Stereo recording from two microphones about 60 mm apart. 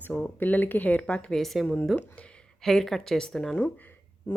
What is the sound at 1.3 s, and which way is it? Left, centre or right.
A woman's voice, centre.